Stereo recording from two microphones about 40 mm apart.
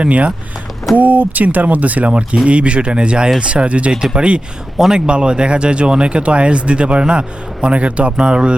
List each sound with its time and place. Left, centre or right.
0.0 s speech: right
0.9 s speech: right; by 3.4 s centre
3.4 s speech: right
3.9 s speech: centre